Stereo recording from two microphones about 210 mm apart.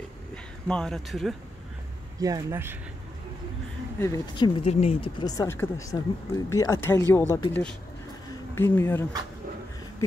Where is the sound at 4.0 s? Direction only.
20° left (ahead or behind).